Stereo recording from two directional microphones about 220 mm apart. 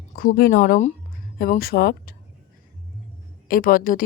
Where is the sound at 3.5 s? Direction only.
40° left (ahead or behind).